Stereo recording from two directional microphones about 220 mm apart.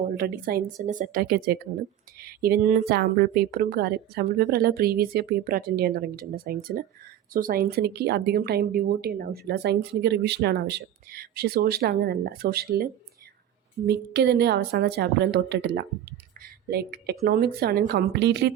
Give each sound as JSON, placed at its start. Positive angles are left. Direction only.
{"t": 0.2, "sound": "a woman's voice", "side_deg": -45}